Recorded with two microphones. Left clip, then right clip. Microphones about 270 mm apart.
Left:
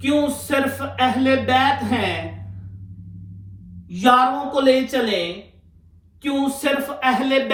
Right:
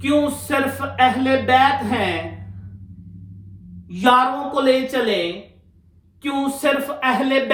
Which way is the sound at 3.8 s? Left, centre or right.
Centre.